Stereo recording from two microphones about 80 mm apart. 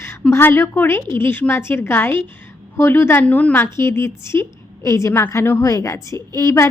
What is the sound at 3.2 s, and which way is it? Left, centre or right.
Speech, centre.